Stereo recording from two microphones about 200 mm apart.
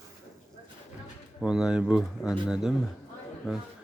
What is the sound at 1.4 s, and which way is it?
Speech, 5° right (ahead or behind).